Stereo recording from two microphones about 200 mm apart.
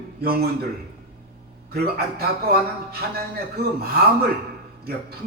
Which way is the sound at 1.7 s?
50° right (ahead or behind).